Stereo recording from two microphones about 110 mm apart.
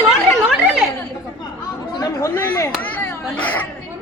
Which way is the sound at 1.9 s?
35° left (ahead or behind).